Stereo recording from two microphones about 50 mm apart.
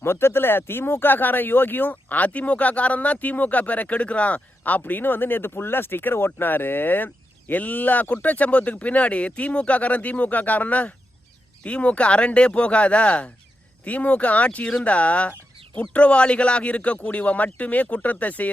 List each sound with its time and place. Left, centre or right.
0.0 s speech: left